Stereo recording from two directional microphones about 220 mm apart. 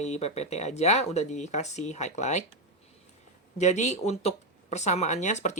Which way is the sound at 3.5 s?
30° left (ahead or behind).